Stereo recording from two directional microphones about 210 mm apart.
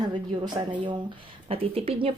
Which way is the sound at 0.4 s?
20° right (ahead or behind).